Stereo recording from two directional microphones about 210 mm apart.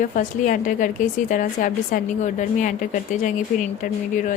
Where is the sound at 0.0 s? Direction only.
40° left (ahead or behind).